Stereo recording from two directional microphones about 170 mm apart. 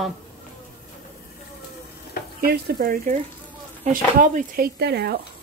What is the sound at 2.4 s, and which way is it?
Speech, 60° right (ahead or behind).